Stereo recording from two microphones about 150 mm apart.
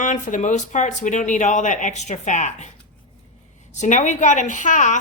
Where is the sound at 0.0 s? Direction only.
55° left (ahead or behind).